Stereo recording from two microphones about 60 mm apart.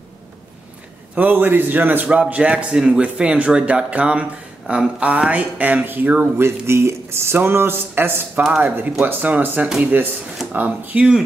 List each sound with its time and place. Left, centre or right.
1.1 s a man's voice: right
6.3 s a man's voice: right